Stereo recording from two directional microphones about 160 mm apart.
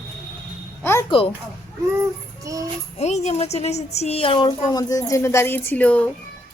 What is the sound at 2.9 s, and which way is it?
A woman's voice, 45° left (ahead or behind).